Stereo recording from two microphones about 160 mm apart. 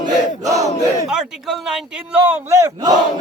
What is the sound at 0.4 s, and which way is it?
Battle cry, 20° right (ahead or behind).